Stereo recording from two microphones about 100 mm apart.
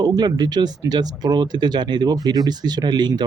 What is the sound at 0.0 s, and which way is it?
Speech, 45° right (ahead or behind).